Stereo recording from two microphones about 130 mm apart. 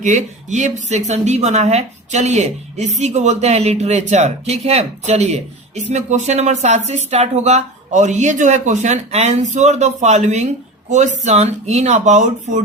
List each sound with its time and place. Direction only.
0.0 s a woman's voice: 70° right (ahead or behind)